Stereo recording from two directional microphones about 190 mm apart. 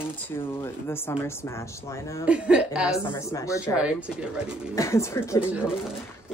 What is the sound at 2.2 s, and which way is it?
Speech, 5° right (ahead or behind).